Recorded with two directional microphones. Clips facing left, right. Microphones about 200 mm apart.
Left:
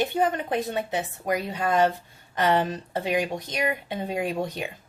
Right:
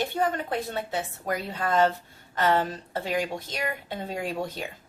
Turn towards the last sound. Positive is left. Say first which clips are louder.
# left 3 dB
turn(degrees=15)  # may be behind; listen again after turning